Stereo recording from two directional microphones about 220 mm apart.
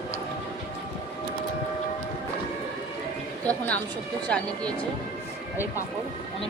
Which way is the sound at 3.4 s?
5° left (ahead or behind).